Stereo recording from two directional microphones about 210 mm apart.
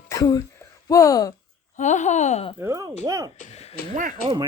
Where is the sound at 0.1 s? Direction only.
15° left (ahead or behind).